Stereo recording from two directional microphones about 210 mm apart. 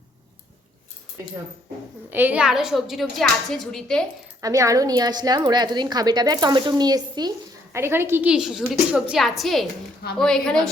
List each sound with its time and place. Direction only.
2.0 s speech: 10° right (ahead or behind)
4.4 s a woman's voice: 15° right (ahead or behind); by 10.7 s 5° left (ahead or behind)